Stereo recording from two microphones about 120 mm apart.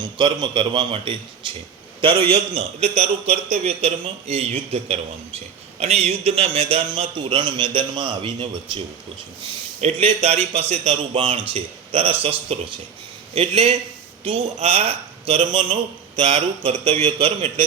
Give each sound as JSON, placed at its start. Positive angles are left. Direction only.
{"t": 0.0, "sound": "speech", "side_deg": -40}
{"t": 2.3, "sound": "a man's voice", "side_deg": -60}
{"t": 9.8, "sound": "a man's voice", "side_deg": -60}